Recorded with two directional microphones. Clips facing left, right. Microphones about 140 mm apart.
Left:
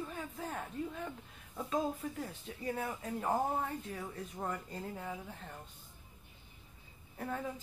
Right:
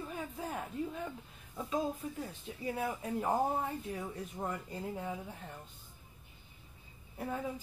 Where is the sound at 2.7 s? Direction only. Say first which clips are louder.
Right 2 dB; 10° right (ahead or behind).